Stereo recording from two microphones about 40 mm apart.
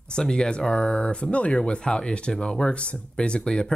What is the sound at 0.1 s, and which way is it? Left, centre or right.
Speech, centre.